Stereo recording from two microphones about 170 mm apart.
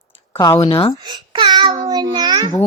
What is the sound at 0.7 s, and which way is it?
Speech, 30° left (ahead or behind).